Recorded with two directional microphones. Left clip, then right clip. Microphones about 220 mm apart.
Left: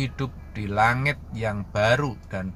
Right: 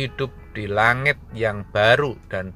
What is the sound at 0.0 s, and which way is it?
Speech, 10° right (ahead or behind).